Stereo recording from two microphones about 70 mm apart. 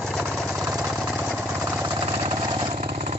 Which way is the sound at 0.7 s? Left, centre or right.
Centre.